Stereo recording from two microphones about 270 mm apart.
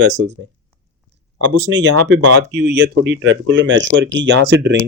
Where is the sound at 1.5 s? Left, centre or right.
Right.